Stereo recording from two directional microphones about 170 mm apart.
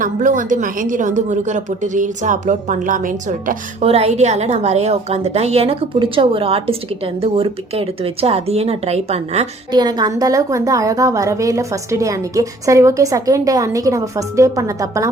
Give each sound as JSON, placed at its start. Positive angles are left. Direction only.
{"t": 0.0, "sound": "a woman's voice", "side_deg": -50}
{"t": 3.8, "sound": "a woman's voice", "side_deg": -40}
{"t": 9.7, "sound": "a woman's voice", "side_deg": -25}